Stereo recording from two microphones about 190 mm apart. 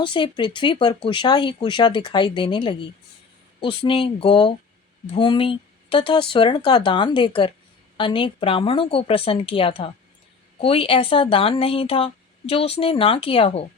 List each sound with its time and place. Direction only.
0.0 s speech: 25° left (ahead or behind)